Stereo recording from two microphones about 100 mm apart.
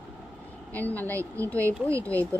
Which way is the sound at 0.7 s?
15° left (ahead or behind).